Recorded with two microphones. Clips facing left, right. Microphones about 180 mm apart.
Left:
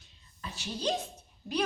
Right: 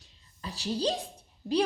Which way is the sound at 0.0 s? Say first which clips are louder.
Right 3 dB; 35° right (ahead or behind).